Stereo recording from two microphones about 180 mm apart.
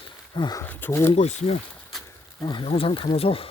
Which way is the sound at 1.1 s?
35° left (ahead or behind).